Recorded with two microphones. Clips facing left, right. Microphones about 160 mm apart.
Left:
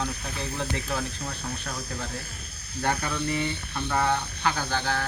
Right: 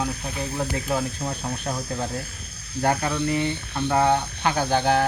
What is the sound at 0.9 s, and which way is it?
Speech, 35° right (ahead or behind).